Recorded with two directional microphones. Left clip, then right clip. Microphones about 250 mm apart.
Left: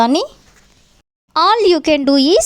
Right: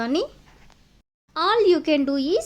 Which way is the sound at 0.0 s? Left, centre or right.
Left.